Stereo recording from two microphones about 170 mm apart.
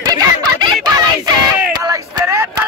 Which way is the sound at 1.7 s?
20° right (ahead or behind).